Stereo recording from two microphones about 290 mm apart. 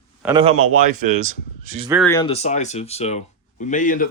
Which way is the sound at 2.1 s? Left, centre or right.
Centre.